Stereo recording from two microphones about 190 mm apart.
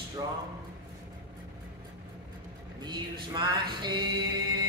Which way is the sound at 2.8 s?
25° right (ahead or behind).